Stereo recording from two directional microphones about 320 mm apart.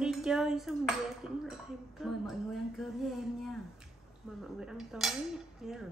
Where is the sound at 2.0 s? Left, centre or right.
Centre.